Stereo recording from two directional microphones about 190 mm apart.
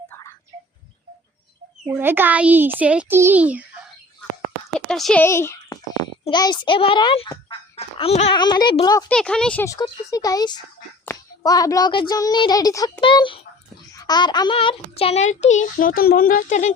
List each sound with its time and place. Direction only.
0.1 s a sound: 15° left (ahead or behind)
1.9 s a child's voice: 10° right (ahead or behind)
4.9 s speech: 5° left (ahead or behind)
5.2 s speech: 15° left (ahead or behind)
7.8 s a sound: 30° left (ahead or behind)
8.4 s speech: 25° left (ahead or behind)
9.0 s speech: 5° left (ahead or behind)
9.6 s a child's voice: 20° left (ahead or behind); by 16.7 s 40° left (ahead or behind)